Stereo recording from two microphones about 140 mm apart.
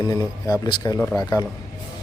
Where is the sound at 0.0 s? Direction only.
25° left (ahead or behind).